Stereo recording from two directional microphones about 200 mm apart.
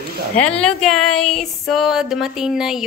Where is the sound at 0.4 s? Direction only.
5° left (ahead or behind).